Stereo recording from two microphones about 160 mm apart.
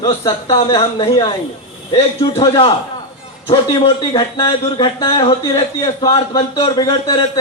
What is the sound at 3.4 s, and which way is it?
A man's voice, 35° left (ahead or behind).